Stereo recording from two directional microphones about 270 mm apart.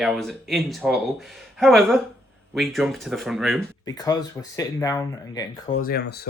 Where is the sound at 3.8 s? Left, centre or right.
Centre.